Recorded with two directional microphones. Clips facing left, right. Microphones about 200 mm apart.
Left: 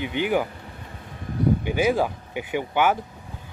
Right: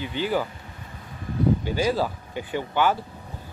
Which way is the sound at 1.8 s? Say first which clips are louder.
Left 2 dB; 10° left (ahead or behind).